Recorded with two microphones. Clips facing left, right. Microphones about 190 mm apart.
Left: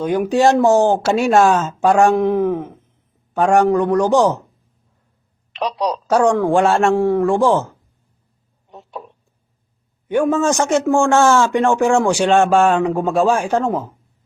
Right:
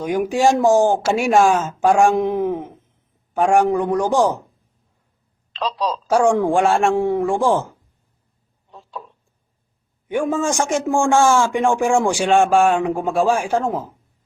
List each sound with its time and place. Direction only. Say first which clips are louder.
0.0 s a man's voice: left 2 dB; 10° right (ahead or behind)
5.5 s a woman's voice: left 2 dB; 20° left (ahead or behind)
6.1 s a man's voice: left 1 dB; 10° right (ahead or behind)
8.7 s a sound: left 2 dB; 20° left (ahead or behind)
10.1 s a man's voice: left 4 dB; 10° right (ahead or behind)